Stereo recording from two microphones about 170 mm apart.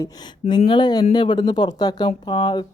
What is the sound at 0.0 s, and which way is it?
Speech, 25° left (ahead or behind).